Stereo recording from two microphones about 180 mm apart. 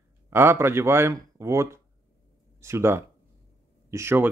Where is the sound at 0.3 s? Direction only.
15° right (ahead or behind).